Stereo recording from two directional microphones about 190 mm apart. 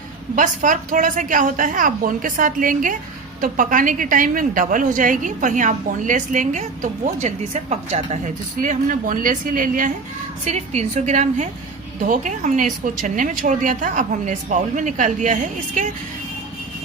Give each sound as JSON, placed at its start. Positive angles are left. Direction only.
{"t": 0.3, "sound": "a woman's voice", "side_deg": -45}